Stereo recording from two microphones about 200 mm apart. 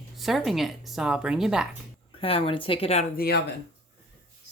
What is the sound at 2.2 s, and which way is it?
Speech, 30° left (ahead or behind).